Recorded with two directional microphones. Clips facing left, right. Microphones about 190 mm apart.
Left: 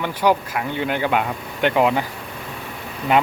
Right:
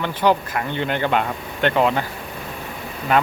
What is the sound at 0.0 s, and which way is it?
Speech, 10° left (ahead or behind).